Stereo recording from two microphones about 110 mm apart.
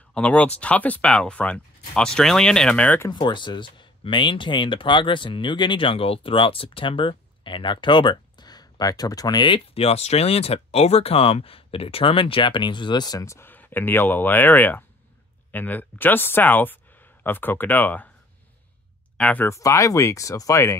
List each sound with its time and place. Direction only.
0.1 s speech: 10° left (ahead or behind)
3.1 s speech: 45° left (ahead or behind)
9.8 s speech: 70° left (ahead or behind); by 13.2 s 40° left (ahead or behind)
13.2 s speech: 25° left (ahead or behind)
19.1 s speech: 10° left (ahead or behind)
19.4 s speech: 25° left (ahead or behind)